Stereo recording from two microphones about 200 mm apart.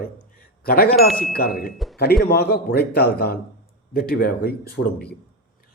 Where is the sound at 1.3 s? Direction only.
45° left (ahead or behind).